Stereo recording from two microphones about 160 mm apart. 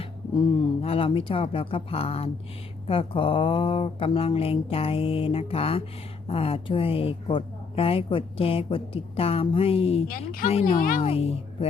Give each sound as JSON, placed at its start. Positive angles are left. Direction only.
{"t": 0.0, "sound": "speech", "side_deg": 35}
{"t": 10.1, "sound": "speech", "side_deg": 65}
{"t": 11.0, "sound": "speech", "side_deg": 35}